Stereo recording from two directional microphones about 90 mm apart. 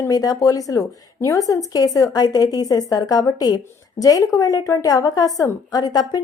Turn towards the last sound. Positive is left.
turn(degrees=45)  # may be behind; listen again after turning